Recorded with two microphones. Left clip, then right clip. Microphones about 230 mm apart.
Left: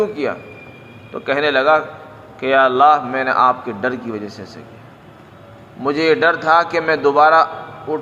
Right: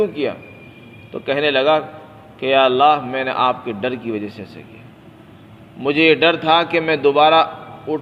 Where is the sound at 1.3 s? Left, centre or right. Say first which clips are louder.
Left 1 dB; right.